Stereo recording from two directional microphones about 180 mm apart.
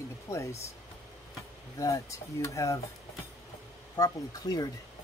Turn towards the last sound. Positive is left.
turn(degrees=20)  # may be behind; listen again after turning